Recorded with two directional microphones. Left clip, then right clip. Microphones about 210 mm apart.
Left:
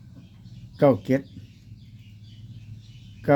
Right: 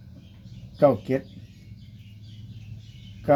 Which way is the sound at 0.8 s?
55° left (ahead or behind).